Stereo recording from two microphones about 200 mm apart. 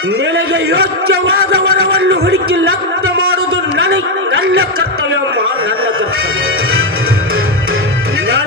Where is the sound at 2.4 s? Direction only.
90° right.